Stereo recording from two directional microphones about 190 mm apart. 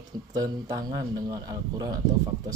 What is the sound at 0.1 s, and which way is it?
Speech, 20° right (ahead or behind).